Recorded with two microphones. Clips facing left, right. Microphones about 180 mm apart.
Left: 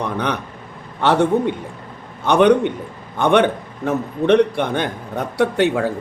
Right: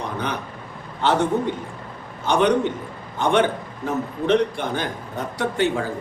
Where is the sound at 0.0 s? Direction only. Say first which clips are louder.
Left 5 dB; 70° left (ahead or behind).